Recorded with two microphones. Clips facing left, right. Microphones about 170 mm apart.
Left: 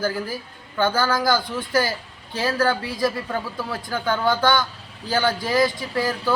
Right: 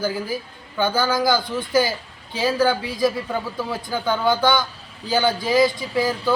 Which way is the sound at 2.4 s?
20° right (ahead or behind).